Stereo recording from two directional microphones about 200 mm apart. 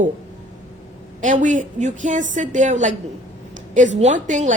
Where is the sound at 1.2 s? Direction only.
40° right (ahead or behind).